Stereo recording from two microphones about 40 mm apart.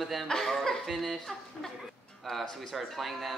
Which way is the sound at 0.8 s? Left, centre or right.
Centre.